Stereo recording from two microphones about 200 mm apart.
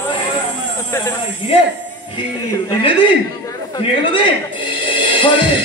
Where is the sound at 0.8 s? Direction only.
10° left (ahead or behind).